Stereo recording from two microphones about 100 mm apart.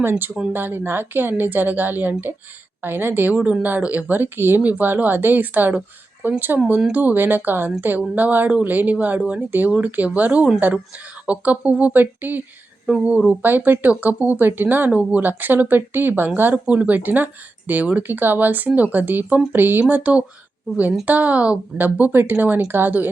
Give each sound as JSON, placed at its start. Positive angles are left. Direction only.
{"t": 0.5, "sound": "a woman's voice", "side_deg": -20}